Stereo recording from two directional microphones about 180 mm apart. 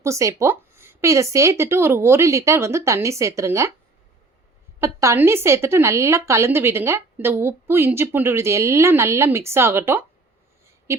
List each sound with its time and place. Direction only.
0.0 s a woman's voice: 15° right (ahead or behind)
4.8 s a woman's voice: 15° right (ahead or behind)